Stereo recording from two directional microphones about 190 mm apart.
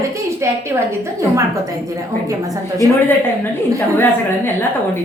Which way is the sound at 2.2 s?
15° right (ahead or behind).